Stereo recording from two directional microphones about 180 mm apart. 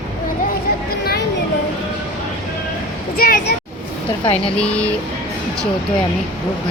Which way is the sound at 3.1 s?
55° left (ahead or behind).